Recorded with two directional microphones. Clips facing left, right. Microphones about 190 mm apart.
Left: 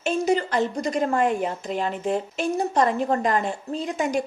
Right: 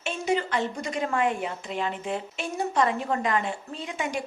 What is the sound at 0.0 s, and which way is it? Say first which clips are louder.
A woman's voice: left 5 dB; 40° left (ahead or behind).